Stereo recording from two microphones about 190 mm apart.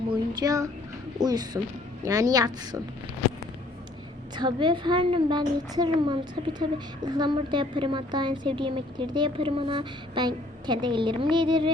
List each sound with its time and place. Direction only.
0.1 s a sound: 20° right (ahead or behind)
1.2 s a woman's voice: 20° right (ahead or behind)
4.4 s a woman's voice: 25° right (ahead or behind)